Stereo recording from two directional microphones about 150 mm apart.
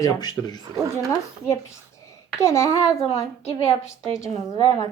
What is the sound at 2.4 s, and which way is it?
Speech, 20° left (ahead or behind).